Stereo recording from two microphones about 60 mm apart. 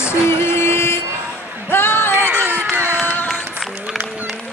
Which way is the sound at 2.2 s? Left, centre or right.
Right.